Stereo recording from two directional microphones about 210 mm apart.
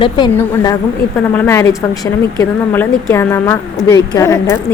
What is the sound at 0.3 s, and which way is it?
A woman's voice, 15° left (ahead or behind).